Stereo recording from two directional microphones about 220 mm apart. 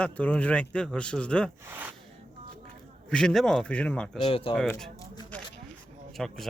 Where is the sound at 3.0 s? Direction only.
5° left (ahead or behind).